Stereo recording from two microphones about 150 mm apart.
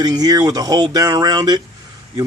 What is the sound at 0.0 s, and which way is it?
Speech, 25° right (ahead or behind).